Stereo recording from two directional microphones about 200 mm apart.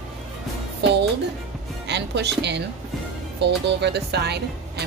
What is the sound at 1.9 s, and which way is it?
Speech, 60° right (ahead or behind).